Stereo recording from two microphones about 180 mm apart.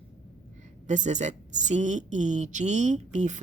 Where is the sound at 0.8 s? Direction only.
40° right (ahead or behind).